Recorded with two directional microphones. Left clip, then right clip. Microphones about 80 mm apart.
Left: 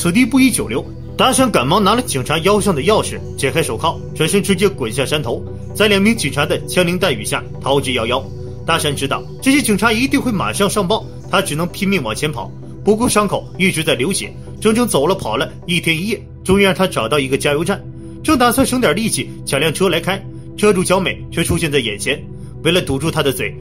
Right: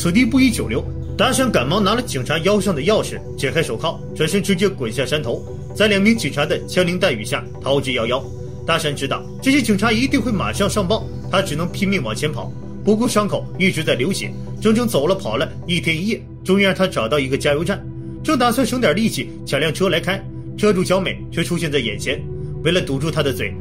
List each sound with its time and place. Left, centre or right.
0.0 s speech: left